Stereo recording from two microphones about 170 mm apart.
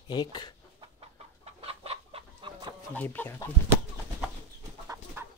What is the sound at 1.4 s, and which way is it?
Chicken, 35° right (ahead or behind).